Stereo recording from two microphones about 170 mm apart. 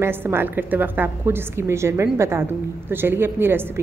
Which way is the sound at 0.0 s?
15° right (ahead or behind).